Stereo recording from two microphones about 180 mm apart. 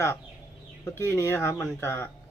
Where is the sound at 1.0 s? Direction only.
15° left (ahead or behind).